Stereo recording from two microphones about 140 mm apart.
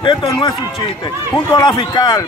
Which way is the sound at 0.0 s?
35° left (ahead or behind).